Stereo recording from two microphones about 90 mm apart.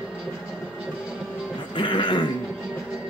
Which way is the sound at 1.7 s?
65° left (ahead or behind).